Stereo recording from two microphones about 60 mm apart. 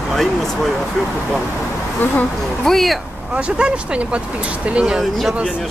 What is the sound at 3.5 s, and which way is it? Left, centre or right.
Speech, centre.